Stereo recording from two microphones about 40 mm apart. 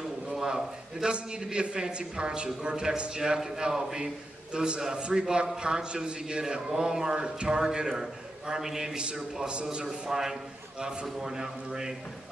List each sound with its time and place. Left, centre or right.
0.3 s a sound: centre
1.0 s a man's voice: right
9.5 s a man's voice: right
11.1 s a man's voice: centre